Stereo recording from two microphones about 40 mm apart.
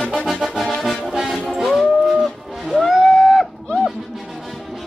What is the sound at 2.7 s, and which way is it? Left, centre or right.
Music, centre.